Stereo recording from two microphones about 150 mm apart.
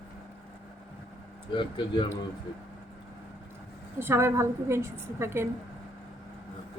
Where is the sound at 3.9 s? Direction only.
15° right (ahead or behind).